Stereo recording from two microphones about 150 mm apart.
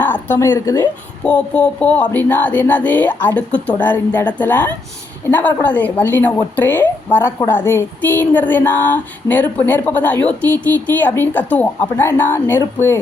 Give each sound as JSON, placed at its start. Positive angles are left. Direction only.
{"t": 0.0, "sound": "a woman's voice", "side_deg": 15}